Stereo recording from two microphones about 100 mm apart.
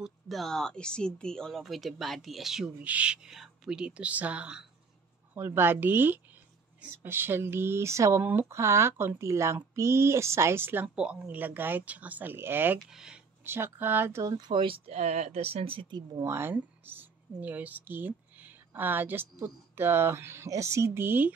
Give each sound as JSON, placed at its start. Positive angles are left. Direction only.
{"t": 0.0, "sound": "speech", "side_deg": 0}
{"t": 5.3, "sound": "speech", "side_deg": -20}
{"t": 12.8, "sound": "speech", "side_deg": -5}
{"t": 13.4, "sound": "speech", "side_deg": -20}
{"t": 14.2, "sound": "speech", "side_deg": -45}
{"t": 16.2, "sound": "speech", "side_deg": -25}